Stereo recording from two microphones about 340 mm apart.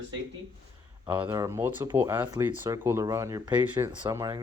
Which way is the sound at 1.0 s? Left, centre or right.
Centre.